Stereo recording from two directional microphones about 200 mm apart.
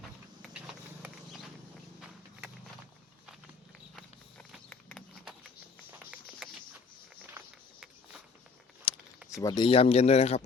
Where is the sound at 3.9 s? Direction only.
5° left (ahead or behind).